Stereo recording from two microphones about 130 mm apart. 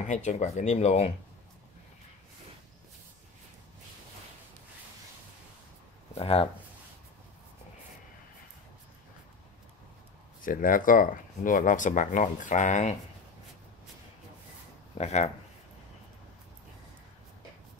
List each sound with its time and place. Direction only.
0.1 s speech: 65° left (ahead or behind)
6.1 s speech: 45° left (ahead or behind)
10.4 s speech: 90° left; by 12.9 s 70° left (ahead or behind)
15.0 s speech: 55° left (ahead or behind)